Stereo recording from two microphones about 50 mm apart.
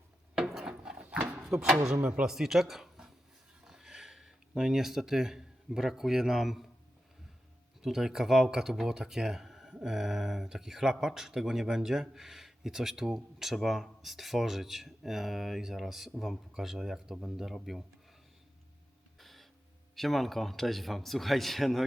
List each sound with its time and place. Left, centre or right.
0.6 s wood: centre
1.5 s speech: centre
7.8 s speech: centre
19.2 s a sound: centre
20.0 s speech: centre